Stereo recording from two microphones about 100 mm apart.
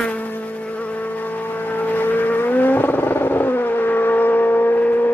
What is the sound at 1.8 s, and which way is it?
Vehicle, 20° left (ahead or behind).